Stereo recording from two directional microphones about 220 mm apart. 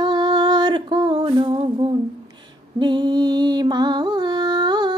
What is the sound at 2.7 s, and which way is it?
Music, 20° right (ahead or behind).